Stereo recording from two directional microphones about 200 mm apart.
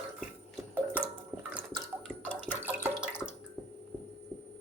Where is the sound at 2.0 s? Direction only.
5° left (ahead or behind).